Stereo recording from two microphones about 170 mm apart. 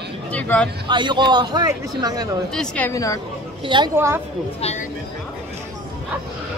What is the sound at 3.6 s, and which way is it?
Speech, 25° right (ahead or behind).